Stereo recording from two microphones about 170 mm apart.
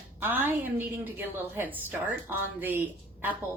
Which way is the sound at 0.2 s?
10° right (ahead or behind).